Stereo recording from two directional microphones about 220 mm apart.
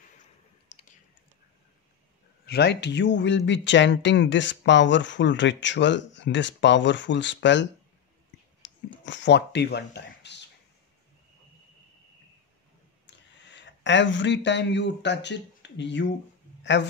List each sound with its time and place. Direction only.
0.7 s typing: 35° left (ahead or behind)
2.4 s speech: 50° left (ahead or behind)
8.6 s a sound: 55° left (ahead or behind)
9.0 s speech: 55° left (ahead or behind)
13.0 s speech: 55° left (ahead or behind)